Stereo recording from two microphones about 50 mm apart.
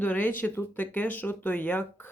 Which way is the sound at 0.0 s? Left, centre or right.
Left.